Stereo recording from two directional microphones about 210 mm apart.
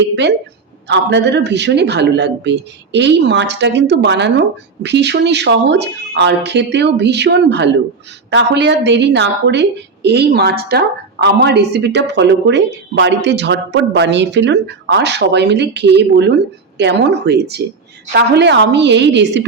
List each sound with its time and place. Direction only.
0.9 s a woman's voice: 55° right (ahead or behind)